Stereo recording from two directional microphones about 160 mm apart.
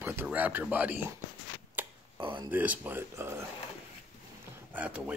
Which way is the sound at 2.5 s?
10° right (ahead or behind).